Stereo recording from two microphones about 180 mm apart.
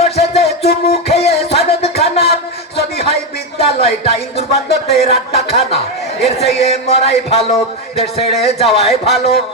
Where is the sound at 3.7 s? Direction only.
35° left (ahead or behind).